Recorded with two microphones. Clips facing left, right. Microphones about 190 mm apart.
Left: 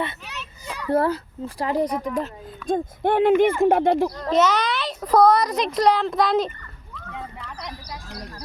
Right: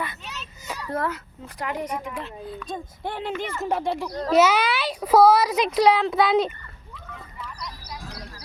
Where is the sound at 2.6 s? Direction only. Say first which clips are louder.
Left 14 dB; 55° left (ahead or behind).